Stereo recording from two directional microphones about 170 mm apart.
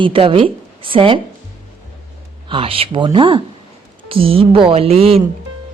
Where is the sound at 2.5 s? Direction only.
35° right (ahead or behind).